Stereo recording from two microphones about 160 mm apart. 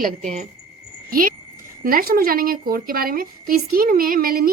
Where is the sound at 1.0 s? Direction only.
60° right (ahead or behind).